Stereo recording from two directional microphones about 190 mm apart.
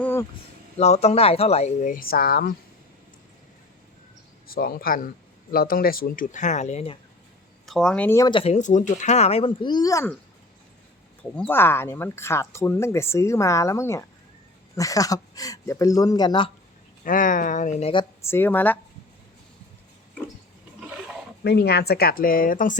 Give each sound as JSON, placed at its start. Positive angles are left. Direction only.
{"t": 0.0, "sound": "a sound", "side_deg": 10}
{"t": 0.8, "sound": "speech", "side_deg": 35}
{"t": 4.4, "sound": "speech", "side_deg": 50}
{"t": 7.7, "sound": "speech", "side_deg": 5}
{"t": 8.3, "sound": "speech", "side_deg": 30}
{"t": 11.2, "sound": "speech", "side_deg": 10}
{"t": 17.0, "sound": "speech", "side_deg": 45}
{"t": 18.2, "sound": "speech", "side_deg": 10}
{"t": 21.4, "sound": "speech", "side_deg": 60}